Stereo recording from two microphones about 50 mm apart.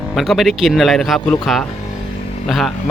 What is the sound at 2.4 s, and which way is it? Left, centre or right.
Speech, centre.